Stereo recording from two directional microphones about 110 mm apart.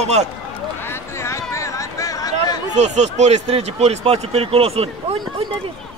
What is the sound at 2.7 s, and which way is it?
Speech, 90° right.